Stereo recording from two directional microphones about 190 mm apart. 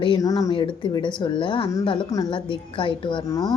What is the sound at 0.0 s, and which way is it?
A woman's voice, 20° left (ahead or behind).